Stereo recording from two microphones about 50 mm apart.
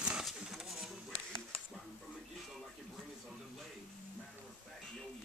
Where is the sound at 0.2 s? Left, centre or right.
Centre.